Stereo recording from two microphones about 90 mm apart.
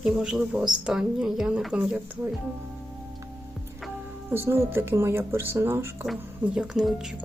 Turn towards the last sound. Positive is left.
turn(degrees=-5)  # may be behind; listen again after turning